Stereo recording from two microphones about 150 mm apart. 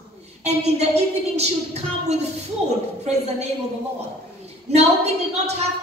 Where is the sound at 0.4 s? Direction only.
45° right (ahead or behind).